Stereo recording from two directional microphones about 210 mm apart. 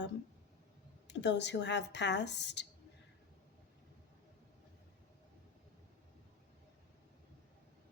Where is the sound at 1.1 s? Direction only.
55° left (ahead or behind).